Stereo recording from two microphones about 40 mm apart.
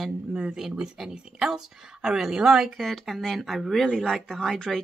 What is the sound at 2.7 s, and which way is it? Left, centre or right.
Speech, centre.